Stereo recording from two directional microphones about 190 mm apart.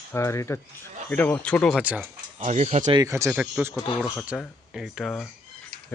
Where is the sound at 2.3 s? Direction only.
35° right (ahead or behind).